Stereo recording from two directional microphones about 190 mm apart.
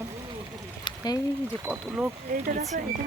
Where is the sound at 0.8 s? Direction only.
20° left (ahead or behind).